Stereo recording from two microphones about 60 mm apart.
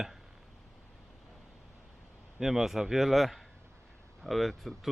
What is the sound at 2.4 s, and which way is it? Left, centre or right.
Speech, centre.